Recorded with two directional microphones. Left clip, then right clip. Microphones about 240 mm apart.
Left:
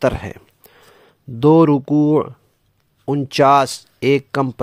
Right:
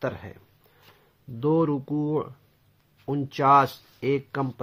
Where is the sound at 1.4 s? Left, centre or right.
Left.